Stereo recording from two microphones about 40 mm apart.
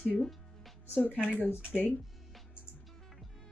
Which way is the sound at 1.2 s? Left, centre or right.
Left.